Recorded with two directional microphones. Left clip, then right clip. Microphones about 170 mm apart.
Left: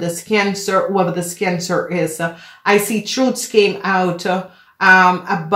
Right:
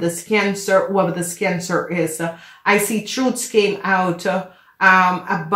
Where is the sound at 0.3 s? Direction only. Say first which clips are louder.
Even; 40° left (ahead or behind).